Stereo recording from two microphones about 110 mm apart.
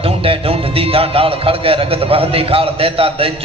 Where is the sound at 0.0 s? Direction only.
60° right (ahead or behind).